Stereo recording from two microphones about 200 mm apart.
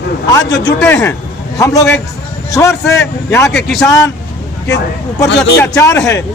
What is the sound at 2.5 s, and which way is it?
Speech, 15° left (ahead or behind).